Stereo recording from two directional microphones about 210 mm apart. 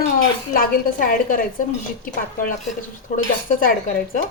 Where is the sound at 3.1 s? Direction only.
40° left (ahead or behind).